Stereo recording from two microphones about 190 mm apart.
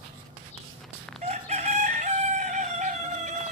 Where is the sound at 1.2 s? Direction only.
35° right (ahead or behind).